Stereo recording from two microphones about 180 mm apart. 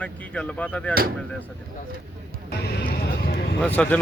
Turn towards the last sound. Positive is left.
turn(degrees=5)  # may be behind; listen again after turning